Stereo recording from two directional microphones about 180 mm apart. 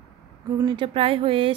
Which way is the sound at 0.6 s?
25° right (ahead or behind).